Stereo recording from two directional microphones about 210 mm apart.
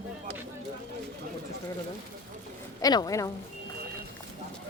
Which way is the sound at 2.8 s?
15° left (ahead or behind).